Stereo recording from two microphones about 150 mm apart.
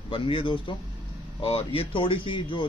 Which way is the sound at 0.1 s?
35° left (ahead or behind).